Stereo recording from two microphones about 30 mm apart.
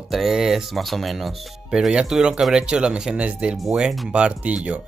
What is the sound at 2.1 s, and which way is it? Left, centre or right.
Speech, centre.